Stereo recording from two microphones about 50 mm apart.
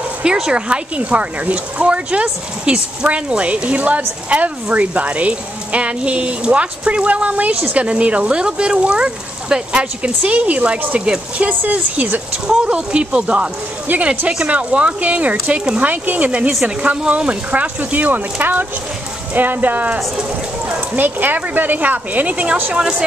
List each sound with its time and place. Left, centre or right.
0.2 s a woman's voice: centre
12.4 s a woman's voice: centre